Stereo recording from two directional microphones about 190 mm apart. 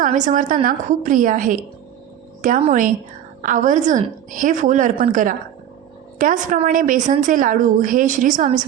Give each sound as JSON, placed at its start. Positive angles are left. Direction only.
{"t": 0.0, "sound": "a woman's voice", "side_deg": -40}